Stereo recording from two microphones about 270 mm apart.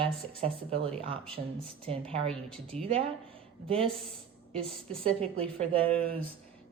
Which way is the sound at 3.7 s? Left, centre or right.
Centre.